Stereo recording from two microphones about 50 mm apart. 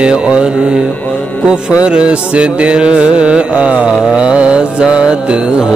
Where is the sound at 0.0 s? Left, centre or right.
Centre.